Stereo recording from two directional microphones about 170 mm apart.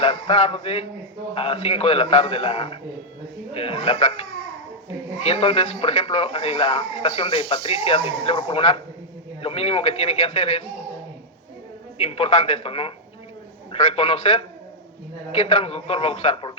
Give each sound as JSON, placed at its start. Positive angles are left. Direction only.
{"t": 0.0, "sound": "speech", "side_deg": 35}
{"t": 5.2, "sound": "speech", "side_deg": 35}
{"t": 11.9, "sound": "speech", "side_deg": 35}
{"t": 13.9, "sound": "speech", "side_deg": 35}